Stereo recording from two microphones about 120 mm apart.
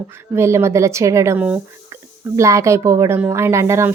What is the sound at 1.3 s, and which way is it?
Speech, 10° right (ahead or behind).